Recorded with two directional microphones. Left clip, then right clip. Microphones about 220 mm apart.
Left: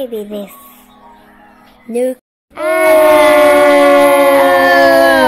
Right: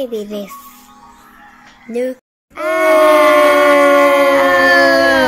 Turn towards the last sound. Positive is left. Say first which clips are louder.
# left 2 dB
turn(degrees=10)  # may be behind; listen again after turning